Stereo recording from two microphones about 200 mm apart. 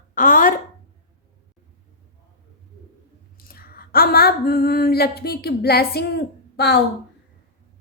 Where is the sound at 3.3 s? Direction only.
50° left (ahead or behind).